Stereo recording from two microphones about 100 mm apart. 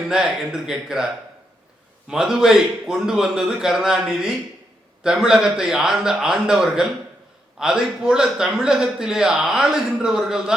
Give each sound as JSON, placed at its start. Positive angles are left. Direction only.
{"t": 0.1, "sound": "speech", "side_deg": -5}
{"t": 2.0, "sound": "a man's voice", "side_deg": -5}